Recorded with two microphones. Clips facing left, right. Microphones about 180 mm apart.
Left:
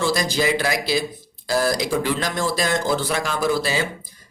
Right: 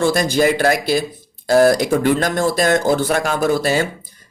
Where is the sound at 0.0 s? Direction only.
55° right (ahead or behind).